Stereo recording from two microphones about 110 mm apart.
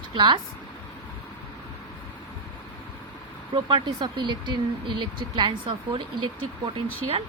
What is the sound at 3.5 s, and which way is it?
Speech, 45° right (ahead or behind).